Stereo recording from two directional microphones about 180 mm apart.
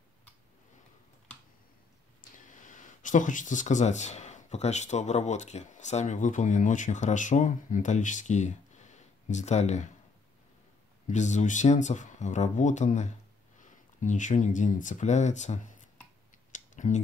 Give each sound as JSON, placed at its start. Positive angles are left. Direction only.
{"t": 2.3, "sound": "speech", "side_deg": 45}
{"t": 11.1, "sound": "speech", "side_deg": 40}
{"t": 16.5, "sound": "clicking", "side_deg": 45}